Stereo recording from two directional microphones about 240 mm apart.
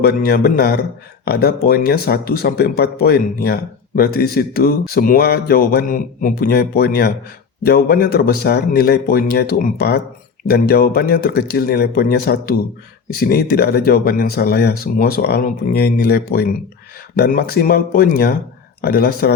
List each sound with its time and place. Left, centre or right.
0.0 s speech: left